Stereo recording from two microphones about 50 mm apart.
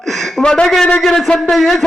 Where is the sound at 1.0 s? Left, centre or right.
Centre.